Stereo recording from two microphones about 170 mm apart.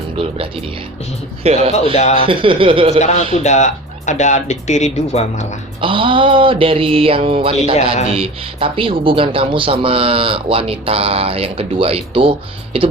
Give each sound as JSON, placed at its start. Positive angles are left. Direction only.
{"t": 0.2, "sound": "speech", "side_deg": -30}
{"t": 1.7, "sound": "speech", "side_deg": 40}
{"t": 2.1, "sound": "speech", "side_deg": -30}
{"t": 3.3, "sound": "speech", "side_deg": 45}
{"t": 5.8, "sound": "speech", "side_deg": -30}